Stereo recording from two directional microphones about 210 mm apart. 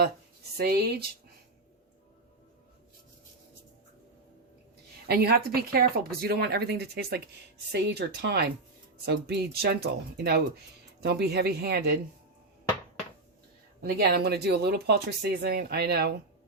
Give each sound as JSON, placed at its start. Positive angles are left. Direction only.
{"t": 0.5, "sound": "speech", "side_deg": -50}
{"t": 5.0, "sound": "speech", "side_deg": -50}
{"t": 14.0, "sound": "speech", "side_deg": -50}